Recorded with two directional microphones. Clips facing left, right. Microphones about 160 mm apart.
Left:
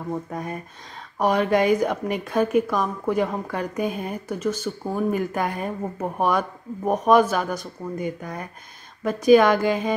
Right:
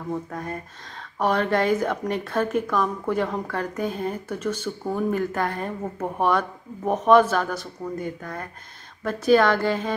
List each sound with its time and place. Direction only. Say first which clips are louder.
0.3 s a woman's voice: left 1 dB; 15° left (ahead or behind)